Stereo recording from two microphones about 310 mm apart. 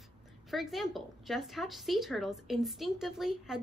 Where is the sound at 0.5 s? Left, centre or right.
Centre.